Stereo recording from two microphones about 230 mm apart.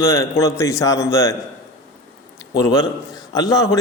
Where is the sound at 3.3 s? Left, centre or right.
Centre.